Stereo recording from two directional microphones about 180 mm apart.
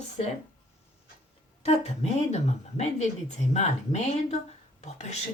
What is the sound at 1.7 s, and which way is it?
Speech, 35° left (ahead or behind).